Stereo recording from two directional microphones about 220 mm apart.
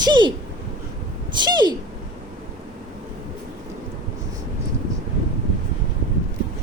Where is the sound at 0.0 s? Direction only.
20° right (ahead or behind).